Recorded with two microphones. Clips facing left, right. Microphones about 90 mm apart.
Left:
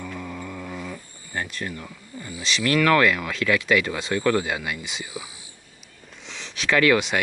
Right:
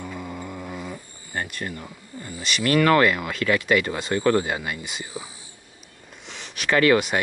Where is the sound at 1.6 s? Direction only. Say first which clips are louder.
Even; 5° right (ahead or behind).